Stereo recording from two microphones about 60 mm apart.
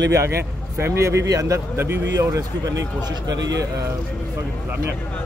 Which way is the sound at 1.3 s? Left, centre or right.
Right.